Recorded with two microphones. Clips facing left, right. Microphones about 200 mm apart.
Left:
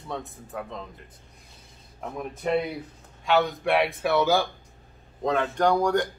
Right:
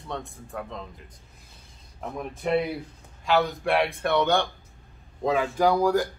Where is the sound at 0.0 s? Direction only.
Centre (ahead or behind).